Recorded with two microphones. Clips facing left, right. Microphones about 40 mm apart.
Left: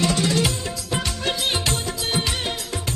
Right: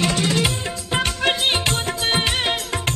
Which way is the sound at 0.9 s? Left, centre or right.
Right.